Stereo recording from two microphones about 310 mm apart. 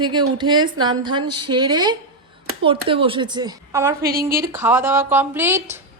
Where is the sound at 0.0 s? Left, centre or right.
Centre.